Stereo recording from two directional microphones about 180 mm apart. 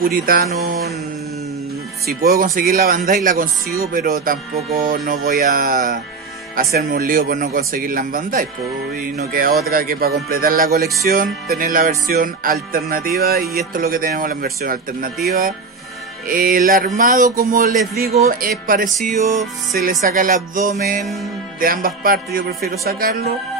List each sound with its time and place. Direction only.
0.0 s speech: 55° right (ahead or behind)
2.0 s speech: 55° right (ahead or behind)
3.3 s music: 50° right (ahead or behind)
15.2 s speech: 55° right (ahead or behind)
16.3 s music: 50° right (ahead or behind)
21.0 s music: centre (ahead or behind)
21.5 s music: 50° right (ahead or behind)